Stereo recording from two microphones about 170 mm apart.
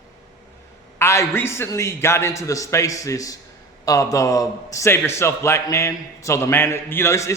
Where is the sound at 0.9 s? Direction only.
15° left (ahead or behind).